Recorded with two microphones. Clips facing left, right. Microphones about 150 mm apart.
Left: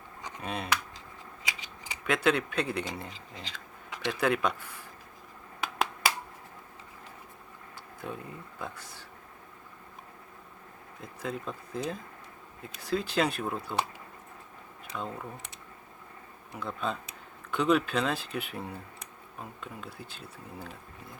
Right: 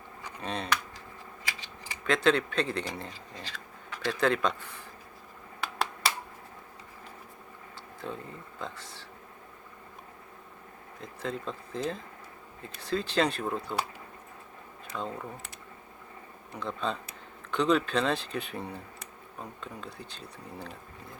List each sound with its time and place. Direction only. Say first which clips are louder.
0.2 s computer keyboard: left 2 dB; 20° left (ahead or behind)
0.4 s speech: right 1 dB; 10° left (ahead or behind)
8.0 s speech: even; 10° left (ahead or behind)
11.2 s speech: right 1 dB; 5° left (ahead or behind)
14.9 s speech: right 1 dB; 5° left (ahead or behind)
16.5 s speech: right 1 dB; 5° left (ahead or behind)